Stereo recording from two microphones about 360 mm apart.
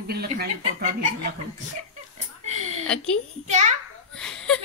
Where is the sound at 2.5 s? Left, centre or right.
Centre.